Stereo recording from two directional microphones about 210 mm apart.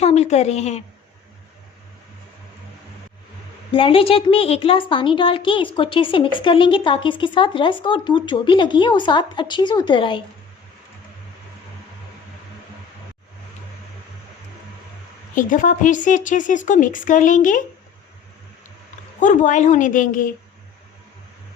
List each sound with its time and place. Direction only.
0.0 s a woman's voice: 30° left (ahead or behind)
3.7 s a woman's voice: 25° left (ahead or behind)
15.4 s a woman's voice: 40° left (ahead or behind)
19.2 s a woman's voice: 35° left (ahead or behind)